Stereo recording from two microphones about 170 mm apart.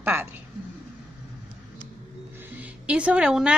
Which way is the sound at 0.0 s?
15° right (ahead or behind).